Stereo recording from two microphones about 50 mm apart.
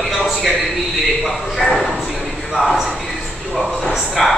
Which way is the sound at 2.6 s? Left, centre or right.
Centre.